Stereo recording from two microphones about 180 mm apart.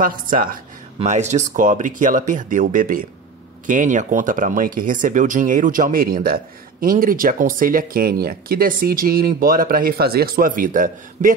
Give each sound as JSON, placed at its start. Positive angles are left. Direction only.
{"t": 0.0, "sound": "speech", "side_deg": -50}
{"t": 0.9, "sound": "speech", "side_deg": -40}